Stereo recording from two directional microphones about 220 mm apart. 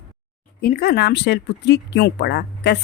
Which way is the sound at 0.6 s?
45° left (ahead or behind).